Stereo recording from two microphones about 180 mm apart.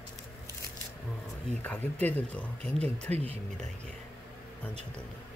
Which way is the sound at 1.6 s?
10° left (ahead or behind).